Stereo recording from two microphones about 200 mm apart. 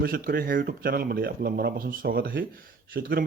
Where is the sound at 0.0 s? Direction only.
45° right (ahead or behind).